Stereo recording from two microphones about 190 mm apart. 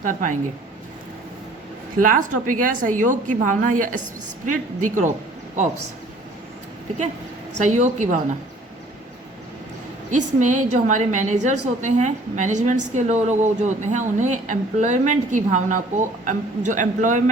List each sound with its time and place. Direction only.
0.0 s a woman's voice: 45° right (ahead or behind)
2.0 s a woman's voice: 45° right (ahead or behind)
7.6 s a woman's voice: 40° right (ahead or behind)
10.1 s a woman's voice: 40° right (ahead or behind)